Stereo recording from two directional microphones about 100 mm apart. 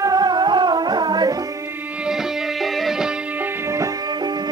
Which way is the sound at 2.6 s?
Centre (ahead or behind).